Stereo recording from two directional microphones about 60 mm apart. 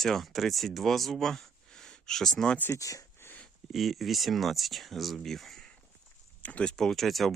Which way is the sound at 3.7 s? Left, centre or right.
Centre.